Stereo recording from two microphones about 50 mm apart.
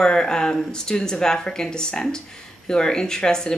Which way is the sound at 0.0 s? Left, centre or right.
Centre.